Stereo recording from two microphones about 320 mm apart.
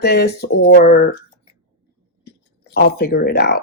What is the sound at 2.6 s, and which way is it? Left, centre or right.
Speech, left.